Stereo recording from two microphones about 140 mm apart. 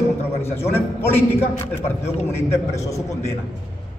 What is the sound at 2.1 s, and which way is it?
Speech, 50° left (ahead or behind).